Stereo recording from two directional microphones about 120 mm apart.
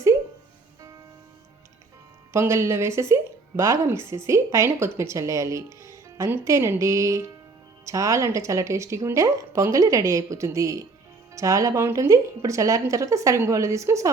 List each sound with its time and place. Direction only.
2.3 s a woman's voice: 25° right (ahead or behind)